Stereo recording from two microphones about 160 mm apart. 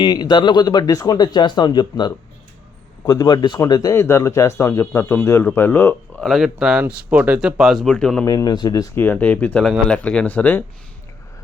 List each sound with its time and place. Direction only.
0.0 s speech: 25° left (ahead or behind)
6.2 s a man's voice: centre (ahead or behind)
8.2 s speech: 20° left (ahead or behind)